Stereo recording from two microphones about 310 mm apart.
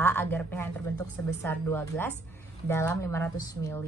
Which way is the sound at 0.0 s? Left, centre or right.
Centre.